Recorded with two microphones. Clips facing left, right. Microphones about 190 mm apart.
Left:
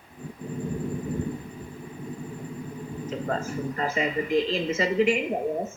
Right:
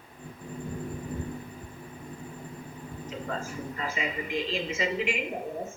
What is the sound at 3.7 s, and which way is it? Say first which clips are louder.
Speech: left 7 dB; 45° left (ahead or behind).